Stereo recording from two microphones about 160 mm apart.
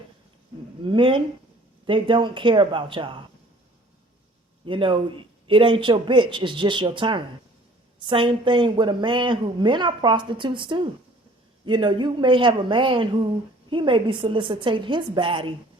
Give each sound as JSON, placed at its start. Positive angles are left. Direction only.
{"t": 0.9, "sound": "a woman's voice", "side_deg": -30}
{"t": 4.6, "sound": "a woman's voice", "side_deg": -30}